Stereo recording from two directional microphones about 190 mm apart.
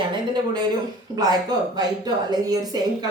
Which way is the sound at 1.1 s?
20° right (ahead or behind).